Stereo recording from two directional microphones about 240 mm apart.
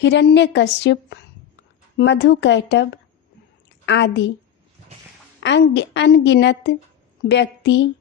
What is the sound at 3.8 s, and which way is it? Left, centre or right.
Speech, left.